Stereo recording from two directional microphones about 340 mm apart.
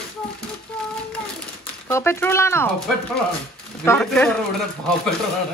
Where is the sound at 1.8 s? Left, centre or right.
Centre.